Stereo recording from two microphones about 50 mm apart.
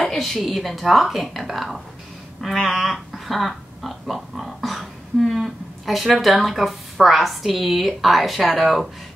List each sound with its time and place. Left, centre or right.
0.0 s a woman's voice: centre